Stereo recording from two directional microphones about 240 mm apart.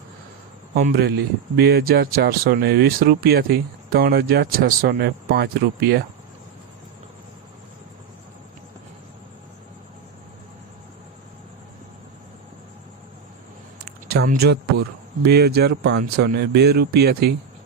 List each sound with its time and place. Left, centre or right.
0.7 s speech: right
14.1 s speech: right